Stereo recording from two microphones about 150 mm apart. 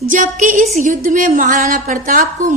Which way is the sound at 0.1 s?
60° right (ahead or behind).